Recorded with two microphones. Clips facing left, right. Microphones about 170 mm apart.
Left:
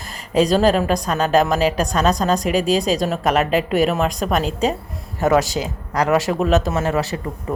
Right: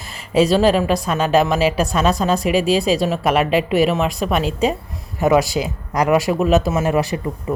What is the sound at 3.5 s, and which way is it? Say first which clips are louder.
Speech: right 1 dB; 45° left (ahead or behind).